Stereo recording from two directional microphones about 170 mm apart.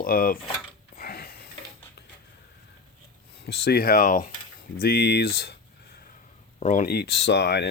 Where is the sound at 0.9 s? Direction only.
60° left (ahead or behind).